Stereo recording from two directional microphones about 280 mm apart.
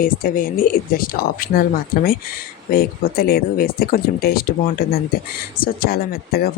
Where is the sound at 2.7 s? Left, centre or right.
Left.